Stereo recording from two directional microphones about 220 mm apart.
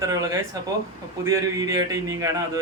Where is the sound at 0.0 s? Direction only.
15° right (ahead or behind).